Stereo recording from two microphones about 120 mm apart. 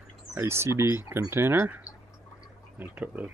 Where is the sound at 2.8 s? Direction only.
15° right (ahead or behind).